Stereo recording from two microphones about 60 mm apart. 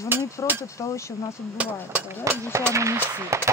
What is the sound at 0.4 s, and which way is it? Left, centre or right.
Hammer, left.